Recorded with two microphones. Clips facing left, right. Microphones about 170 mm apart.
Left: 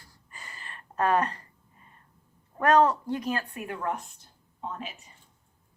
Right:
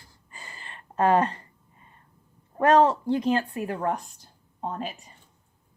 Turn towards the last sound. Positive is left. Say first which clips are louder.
# right 5 dB
turn(degrees=-40)  # may be behind; listen again after turning